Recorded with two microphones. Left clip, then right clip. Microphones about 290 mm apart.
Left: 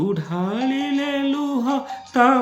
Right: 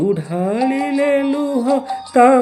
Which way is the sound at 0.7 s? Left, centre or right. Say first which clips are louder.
Right 7 dB; left.